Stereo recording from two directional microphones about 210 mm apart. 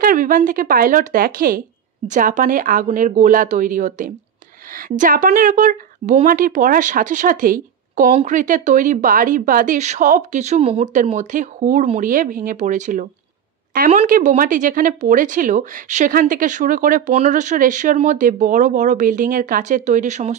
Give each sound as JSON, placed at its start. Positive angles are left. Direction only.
{"t": 0.0, "sound": "speech", "side_deg": -40}